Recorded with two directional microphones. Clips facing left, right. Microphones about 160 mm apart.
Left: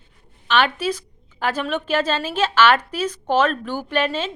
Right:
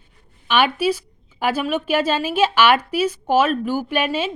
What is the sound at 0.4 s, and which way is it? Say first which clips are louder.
A woman's voice: right 2 dB; 10° right (ahead or behind).